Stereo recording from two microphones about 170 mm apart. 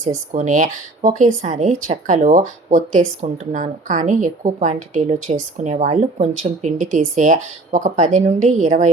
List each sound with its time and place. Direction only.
0.0 s a woman's voice: 50° right (ahead or behind)